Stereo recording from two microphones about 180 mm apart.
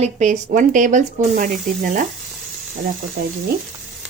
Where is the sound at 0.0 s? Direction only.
45° right (ahead or behind).